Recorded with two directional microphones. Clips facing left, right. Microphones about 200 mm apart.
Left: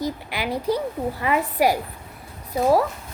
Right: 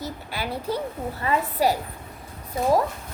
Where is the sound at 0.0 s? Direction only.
15° left (ahead or behind).